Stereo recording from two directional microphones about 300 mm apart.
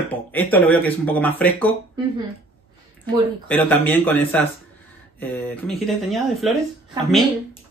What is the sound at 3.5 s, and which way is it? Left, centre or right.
Speech, centre.